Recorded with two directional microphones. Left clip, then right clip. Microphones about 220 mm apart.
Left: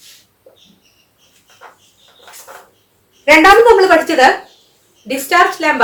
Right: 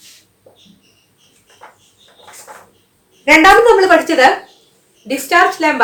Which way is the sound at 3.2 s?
15° right (ahead or behind).